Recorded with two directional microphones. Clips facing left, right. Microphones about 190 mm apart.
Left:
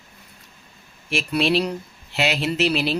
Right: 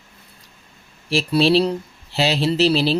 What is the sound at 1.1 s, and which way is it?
Speech, 35° right (ahead or behind).